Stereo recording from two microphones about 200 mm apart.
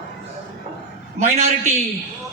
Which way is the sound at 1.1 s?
35° right (ahead or behind).